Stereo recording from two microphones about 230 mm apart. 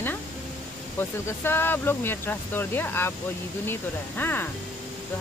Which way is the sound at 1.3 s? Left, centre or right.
Centre.